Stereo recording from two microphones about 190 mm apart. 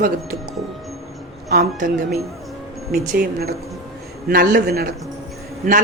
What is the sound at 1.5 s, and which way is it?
Speech, 50° right (ahead or behind).